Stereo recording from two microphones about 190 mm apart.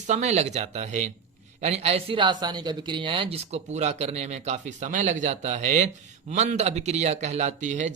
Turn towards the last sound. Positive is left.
turn(degrees=-40)  # may be behind; listen again after turning